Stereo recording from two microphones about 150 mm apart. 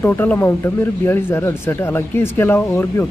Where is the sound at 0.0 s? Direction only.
15° left (ahead or behind).